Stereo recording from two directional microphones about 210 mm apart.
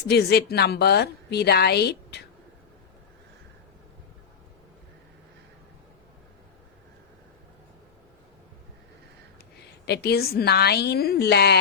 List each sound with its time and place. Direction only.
0.1 s a woman's voice: 50° left (ahead or behind)
9.8 s a woman's voice: 50° left (ahead or behind)